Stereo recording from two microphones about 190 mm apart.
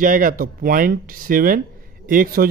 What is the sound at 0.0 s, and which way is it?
A man's voice, 45° right (ahead or behind).